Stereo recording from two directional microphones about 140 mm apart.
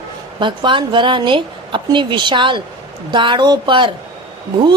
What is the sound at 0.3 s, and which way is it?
A woman's voice, 35° right (ahead or behind).